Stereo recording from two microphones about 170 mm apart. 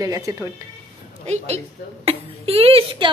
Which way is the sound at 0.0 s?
20° right (ahead or behind).